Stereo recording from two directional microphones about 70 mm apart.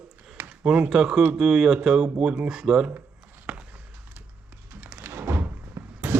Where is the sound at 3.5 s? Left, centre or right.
Centre.